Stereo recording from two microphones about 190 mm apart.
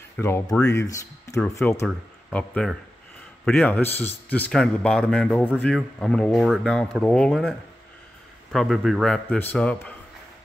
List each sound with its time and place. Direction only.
0.2 s a man's voice: 10° left (ahead or behind)